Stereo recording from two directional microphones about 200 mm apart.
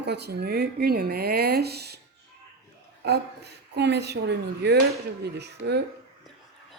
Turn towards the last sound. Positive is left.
turn(degrees=-55)  # may be behind; listen again after turning